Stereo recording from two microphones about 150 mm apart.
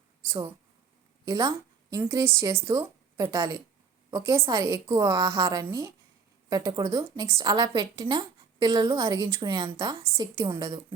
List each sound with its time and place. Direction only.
0.3 s a woman's voice: 20° right (ahead or behind)
2.6 s a sound: 20° right (ahead or behind)
3.3 s a woman's voice: 20° right (ahead or behind)